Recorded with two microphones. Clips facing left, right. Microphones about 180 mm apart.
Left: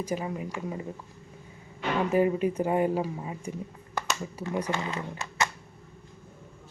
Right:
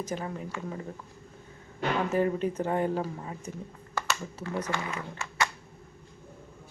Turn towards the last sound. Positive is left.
turn(degrees=20)  # may be behind; listen again after turning